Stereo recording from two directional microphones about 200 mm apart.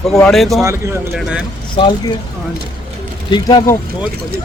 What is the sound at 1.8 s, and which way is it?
Speech, 25° left (ahead or behind).